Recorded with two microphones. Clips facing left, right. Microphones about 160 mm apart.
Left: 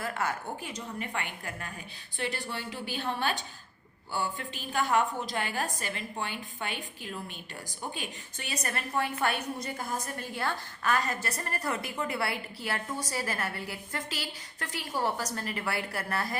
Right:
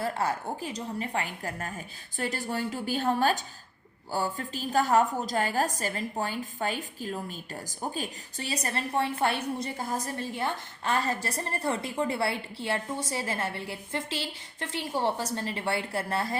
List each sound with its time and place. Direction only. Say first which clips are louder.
0.0 s a woman's voice: right 3 dB; 30° right (ahead or behind)